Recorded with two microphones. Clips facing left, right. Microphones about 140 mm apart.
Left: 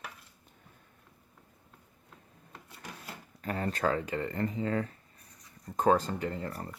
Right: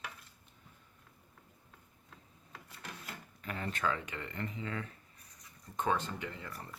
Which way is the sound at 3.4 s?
40° left (ahead or behind).